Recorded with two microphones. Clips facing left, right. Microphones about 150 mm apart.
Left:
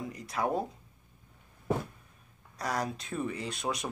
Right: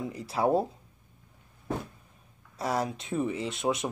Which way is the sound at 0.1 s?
30° right (ahead or behind).